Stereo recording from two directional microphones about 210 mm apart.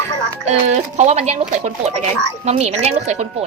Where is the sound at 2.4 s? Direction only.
30° right (ahead or behind).